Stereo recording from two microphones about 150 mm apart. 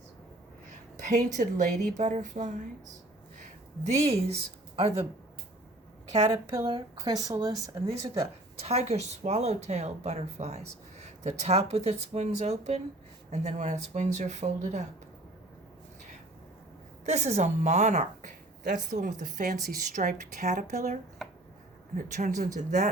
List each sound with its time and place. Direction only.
0.9 s speech: 55° right (ahead or behind)
3.3 s a sound: 50° right (ahead or behind)
6.3 s speech: 20° right (ahead or behind)
6.7 s speech: 30° right (ahead or behind)
8.5 s speech: 45° right (ahead or behind)
17.1 s speech: 50° right (ahead or behind)